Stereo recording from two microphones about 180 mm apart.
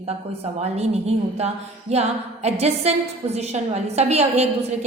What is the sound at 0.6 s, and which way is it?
A woman's voice, 35° right (ahead or behind).